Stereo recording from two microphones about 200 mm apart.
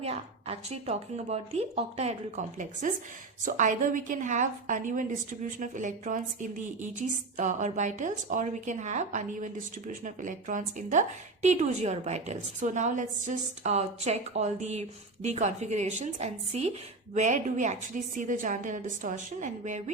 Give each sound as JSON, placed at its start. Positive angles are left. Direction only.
{"t": 0.0, "sound": "a woman's voice", "side_deg": -30}